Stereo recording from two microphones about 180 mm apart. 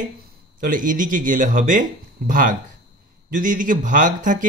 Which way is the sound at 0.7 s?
50° right (ahead or behind).